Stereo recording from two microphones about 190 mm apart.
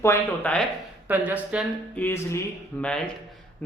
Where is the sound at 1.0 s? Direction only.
10° right (ahead or behind).